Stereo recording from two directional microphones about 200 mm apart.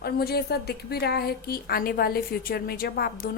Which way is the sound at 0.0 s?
50° left (ahead or behind).